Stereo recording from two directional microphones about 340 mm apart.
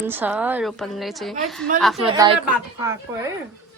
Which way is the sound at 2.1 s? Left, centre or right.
Centre.